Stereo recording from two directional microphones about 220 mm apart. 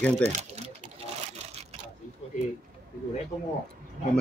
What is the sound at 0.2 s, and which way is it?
Speech, 30° right (ahead or behind).